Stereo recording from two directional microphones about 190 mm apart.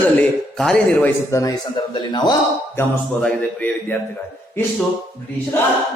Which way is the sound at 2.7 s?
10° left (ahead or behind).